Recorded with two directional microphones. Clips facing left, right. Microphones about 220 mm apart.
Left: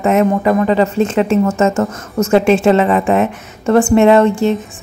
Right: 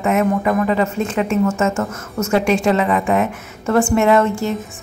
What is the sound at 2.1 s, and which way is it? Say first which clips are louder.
A woman's voice: left 5 dB; 25° left (ahead or behind).